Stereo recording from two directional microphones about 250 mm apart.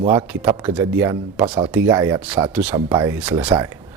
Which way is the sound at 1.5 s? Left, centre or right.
Centre.